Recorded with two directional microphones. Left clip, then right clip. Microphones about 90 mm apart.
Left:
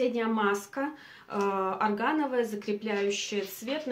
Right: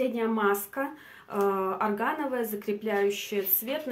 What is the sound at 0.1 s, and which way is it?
Speech, 25° right (ahead or behind).